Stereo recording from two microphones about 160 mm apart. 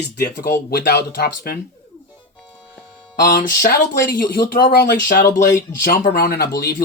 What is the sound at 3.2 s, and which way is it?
Speech, 60° left (ahead or behind).